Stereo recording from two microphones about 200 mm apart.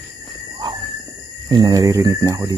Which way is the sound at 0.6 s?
20° right (ahead or behind).